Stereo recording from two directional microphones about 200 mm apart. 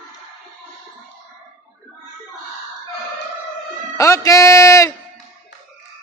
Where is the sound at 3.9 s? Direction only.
15° left (ahead or behind).